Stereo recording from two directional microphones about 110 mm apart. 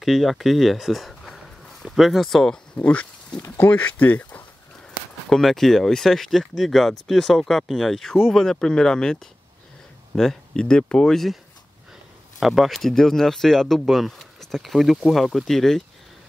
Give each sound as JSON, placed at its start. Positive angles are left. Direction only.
{"t": 0.0, "sound": "speech", "side_deg": 0}
{"t": 5.3, "sound": "speech", "side_deg": 5}
{"t": 12.4, "sound": "speech", "side_deg": 0}